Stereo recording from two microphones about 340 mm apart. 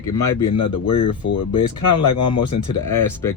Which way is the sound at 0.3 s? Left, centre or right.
Left.